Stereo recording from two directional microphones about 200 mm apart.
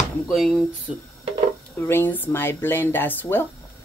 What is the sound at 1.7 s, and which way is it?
Speech, 10° left (ahead or behind).